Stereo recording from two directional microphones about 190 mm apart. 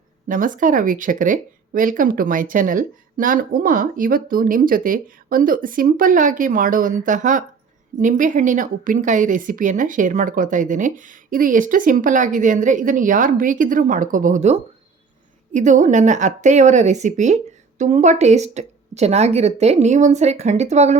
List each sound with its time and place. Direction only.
0.3 s a woman's voice: 45° right (ahead or behind)